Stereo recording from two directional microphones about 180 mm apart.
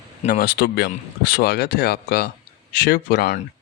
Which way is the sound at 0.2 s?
50° left (ahead or behind).